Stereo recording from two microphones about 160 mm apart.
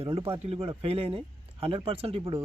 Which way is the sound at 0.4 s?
35° right (ahead or behind).